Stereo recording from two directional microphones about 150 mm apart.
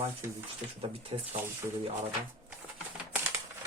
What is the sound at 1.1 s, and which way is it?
Speech, 35° right (ahead or behind).